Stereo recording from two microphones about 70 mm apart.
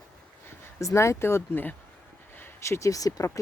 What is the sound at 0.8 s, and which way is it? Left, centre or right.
Speech, left.